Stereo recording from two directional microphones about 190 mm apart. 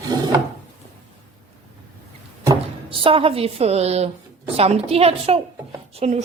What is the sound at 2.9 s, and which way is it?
A woman's voice, 30° right (ahead or behind).